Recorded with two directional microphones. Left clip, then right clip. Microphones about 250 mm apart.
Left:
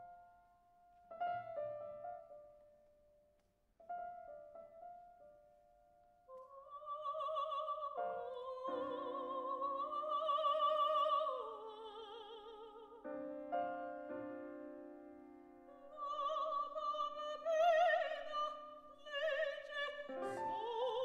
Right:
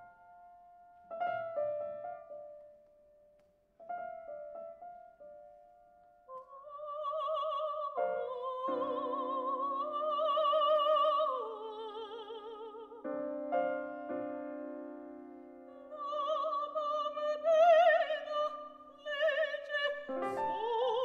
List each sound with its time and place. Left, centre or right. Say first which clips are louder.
1.0 s music: right 6 dB; right
7.0 s opera: right 6 dB; right
7.9 s music: right 8 dB; right